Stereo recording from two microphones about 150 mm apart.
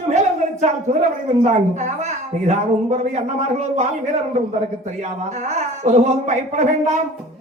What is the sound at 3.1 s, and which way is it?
Speech, 50° right (ahead or behind).